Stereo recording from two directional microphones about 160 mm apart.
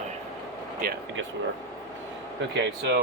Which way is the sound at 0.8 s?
60° right (ahead or behind).